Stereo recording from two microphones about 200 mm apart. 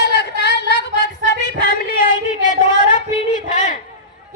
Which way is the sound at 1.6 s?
45° left (ahead or behind).